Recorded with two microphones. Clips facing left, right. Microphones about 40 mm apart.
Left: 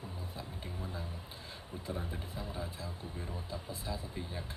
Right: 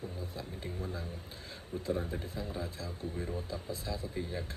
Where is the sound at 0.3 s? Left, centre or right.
Left.